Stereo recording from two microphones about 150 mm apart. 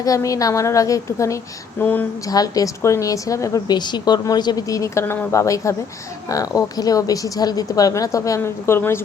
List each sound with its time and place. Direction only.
0.0 s a woman's voice: 20° left (ahead or behind)
2.2 s a woman's voice: 25° left (ahead or behind)